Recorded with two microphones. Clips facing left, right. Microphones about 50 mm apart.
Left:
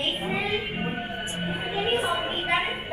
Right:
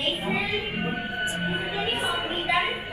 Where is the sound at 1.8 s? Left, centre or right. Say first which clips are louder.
Left 5 dB; left.